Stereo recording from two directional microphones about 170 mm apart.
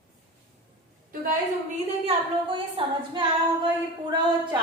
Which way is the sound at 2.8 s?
30° right (ahead or behind).